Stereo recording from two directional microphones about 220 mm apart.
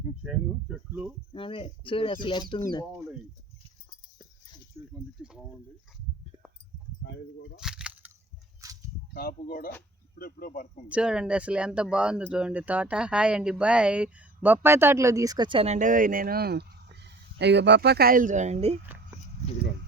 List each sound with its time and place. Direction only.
0.2 s speech: 5° right (ahead or behind)
1.3 s speech: 25° left (ahead or behind)
5.2 s speech: 5° right (ahead or behind)
7.0 s keys jangling: 50° left (ahead or behind)
7.6 s a sound: 5° right (ahead or behind)
8.6 s a sound: 15° right (ahead or behind)
9.1 s speech: 40° left (ahead or behind)
10.8 s speech: 5° right (ahead or behind); by 18.8 s 30° right (ahead or behind)